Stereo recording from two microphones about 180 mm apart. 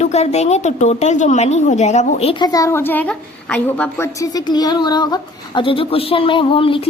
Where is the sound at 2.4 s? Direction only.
20° left (ahead or behind).